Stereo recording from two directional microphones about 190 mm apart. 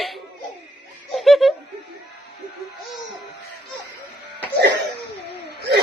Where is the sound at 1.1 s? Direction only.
Centre (ahead or behind).